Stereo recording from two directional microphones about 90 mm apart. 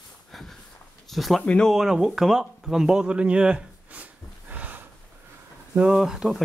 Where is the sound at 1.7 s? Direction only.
5° right (ahead or behind).